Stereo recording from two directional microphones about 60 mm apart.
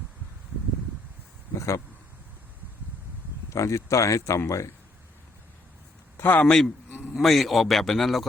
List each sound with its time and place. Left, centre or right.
1.5 s a sound: left
3.5 s speech: left
6.4 s a man's voice: centre
7.1 s a man's voice: centre